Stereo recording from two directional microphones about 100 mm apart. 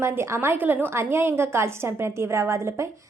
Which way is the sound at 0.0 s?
25° right (ahead or behind).